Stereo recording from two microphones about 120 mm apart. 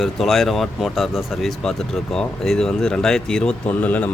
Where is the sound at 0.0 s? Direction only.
5° left (ahead or behind).